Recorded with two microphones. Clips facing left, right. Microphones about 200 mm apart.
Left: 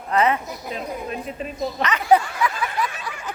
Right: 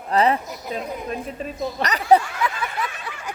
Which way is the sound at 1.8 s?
40° right (ahead or behind).